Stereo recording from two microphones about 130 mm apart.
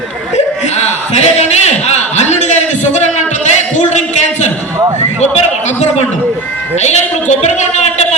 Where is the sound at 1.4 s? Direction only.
60° left (ahead or behind).